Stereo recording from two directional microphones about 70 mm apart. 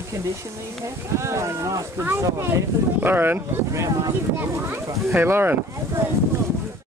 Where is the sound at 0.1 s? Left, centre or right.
Right.